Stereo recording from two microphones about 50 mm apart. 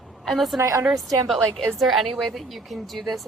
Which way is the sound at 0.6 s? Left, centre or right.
Right.